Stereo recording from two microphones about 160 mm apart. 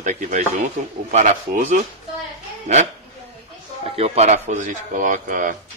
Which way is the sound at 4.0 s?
45° right (ahead or behind).